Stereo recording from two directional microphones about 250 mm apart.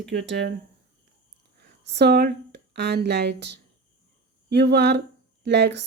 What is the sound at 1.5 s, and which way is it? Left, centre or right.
Speech, right.